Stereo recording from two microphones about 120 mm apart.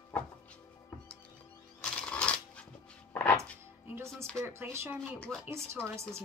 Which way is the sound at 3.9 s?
25° right (ahead or behind).